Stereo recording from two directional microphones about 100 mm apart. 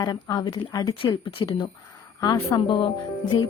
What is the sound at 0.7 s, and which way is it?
Speech, 35° left (ahead or behind).